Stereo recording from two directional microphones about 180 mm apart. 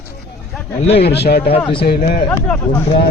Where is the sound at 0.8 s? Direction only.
35° left (ahead or behind).